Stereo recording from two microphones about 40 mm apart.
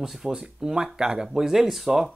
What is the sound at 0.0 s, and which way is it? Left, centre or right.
Speech, centre.